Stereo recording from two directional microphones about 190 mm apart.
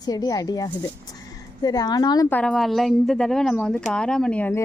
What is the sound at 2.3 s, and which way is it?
Speech, 5° left (ahead or behind).